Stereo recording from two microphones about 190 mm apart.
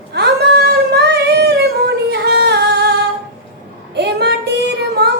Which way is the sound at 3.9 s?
60° right (ahead or behind).